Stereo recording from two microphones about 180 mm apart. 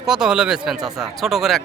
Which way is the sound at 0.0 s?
5° right (ahead or behind).